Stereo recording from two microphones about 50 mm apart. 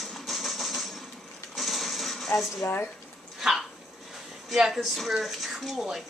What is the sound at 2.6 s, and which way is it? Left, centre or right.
Speech, left.